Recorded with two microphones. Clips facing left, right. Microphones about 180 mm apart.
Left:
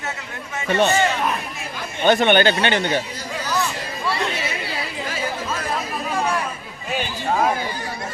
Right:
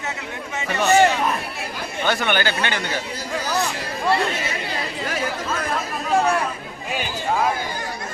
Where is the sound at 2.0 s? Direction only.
20° left (ahead or behind).